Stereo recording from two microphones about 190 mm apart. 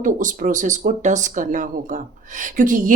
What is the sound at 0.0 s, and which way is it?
Speech, 45° right (ahead or behind).